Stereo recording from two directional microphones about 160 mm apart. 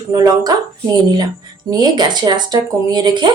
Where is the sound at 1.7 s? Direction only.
25° right (ahead or behind).